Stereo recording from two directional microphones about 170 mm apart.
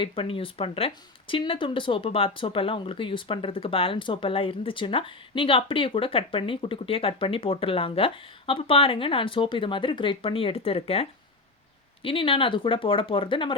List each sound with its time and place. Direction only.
0.0 s speech: 30° left (ahead or behind)
12.0 s speech: 30° left (ahead or behind)